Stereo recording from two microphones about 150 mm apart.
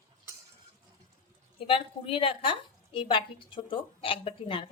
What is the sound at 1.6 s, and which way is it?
A woman's voice, 40° left (ahead or behind).